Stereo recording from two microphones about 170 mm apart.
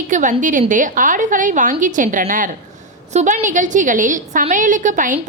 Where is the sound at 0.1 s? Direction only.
50° right (ahead or behind).